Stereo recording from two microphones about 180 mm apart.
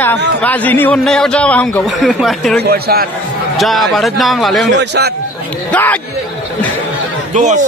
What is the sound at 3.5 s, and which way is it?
Speech, centre (ahead or behind).